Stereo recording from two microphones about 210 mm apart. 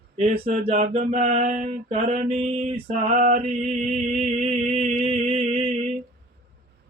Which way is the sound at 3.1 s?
45° right (ahead or behind).